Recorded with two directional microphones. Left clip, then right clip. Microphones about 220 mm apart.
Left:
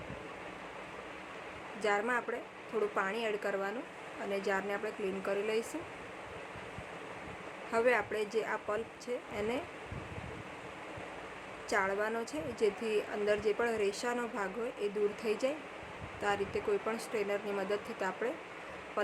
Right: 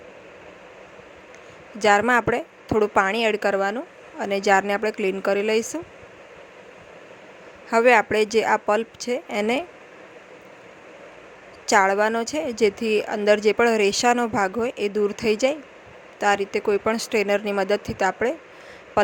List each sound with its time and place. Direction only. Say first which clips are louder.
1.8 s a woman's voice: right 15 dB; 40° right (ahead or behind)
7.7 s a woman's voice: right 14 dB; 40° right (ahead or behind)
11.6 s a woman's voice: right 15 dB; 40° right (ahead or behind)